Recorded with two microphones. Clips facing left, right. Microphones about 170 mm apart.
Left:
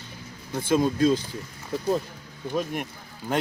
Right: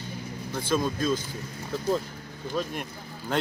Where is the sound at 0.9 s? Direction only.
65° left (ahead or behind).